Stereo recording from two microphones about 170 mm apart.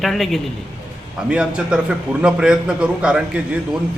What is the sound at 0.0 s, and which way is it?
A man's voice, centre (ahead or behind).